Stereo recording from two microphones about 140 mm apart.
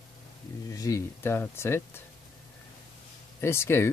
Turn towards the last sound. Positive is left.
turn(degrees=20)  # may be behind; listen again after turning